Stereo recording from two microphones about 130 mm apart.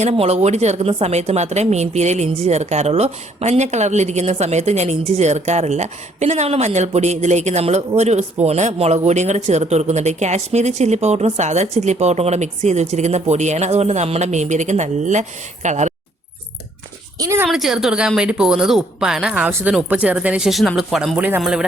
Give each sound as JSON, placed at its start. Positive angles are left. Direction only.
{"t": 0.0, "sound": "a woman's voice", "side_deg": -50}
{"t": 17.2, "sound": "speech", "side_deg": -25}
{"t": 17.4, "sound": "a woman's voice", "side_deg": -5}
{"t": 19.5, "sound": "speech", "side_deg": -15}